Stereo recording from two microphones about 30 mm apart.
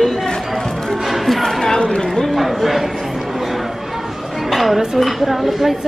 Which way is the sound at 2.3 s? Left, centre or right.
Centre.